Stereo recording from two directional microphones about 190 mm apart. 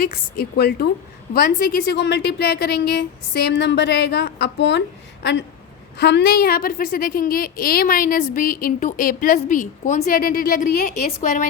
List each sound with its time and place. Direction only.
0.0 s a woman's voice: 55° left (ahead or behind)